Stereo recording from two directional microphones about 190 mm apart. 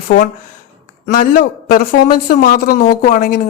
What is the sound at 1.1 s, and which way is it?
Speech, 45° left (ahead or behind).